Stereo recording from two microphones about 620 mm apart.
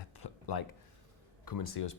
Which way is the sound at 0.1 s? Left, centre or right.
Left.